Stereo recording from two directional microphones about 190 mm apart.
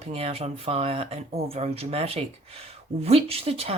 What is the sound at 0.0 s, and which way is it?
Speech, 30° right (ahead or behind).